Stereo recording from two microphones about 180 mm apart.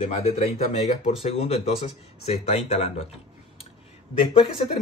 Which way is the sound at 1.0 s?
35° left (ahead or behind).